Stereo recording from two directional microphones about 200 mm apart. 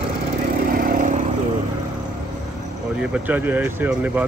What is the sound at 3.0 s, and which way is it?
Speech, 10° right (ahead or behind).